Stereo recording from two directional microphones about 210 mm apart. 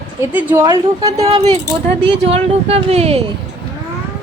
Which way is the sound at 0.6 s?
25° right (ahead or behind).